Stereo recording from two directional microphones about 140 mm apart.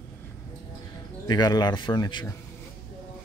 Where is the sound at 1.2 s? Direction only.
30° left (ahead or behind).